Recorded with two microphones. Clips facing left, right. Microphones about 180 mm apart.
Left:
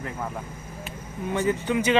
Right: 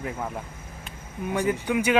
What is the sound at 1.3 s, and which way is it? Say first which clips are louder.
Speech: even; 10° right (ahead or behind).